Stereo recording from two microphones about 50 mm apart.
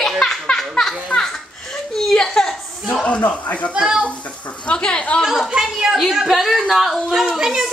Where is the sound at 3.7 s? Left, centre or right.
Right.